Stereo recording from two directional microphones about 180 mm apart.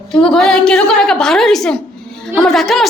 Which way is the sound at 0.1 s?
Centre (ahead or behind).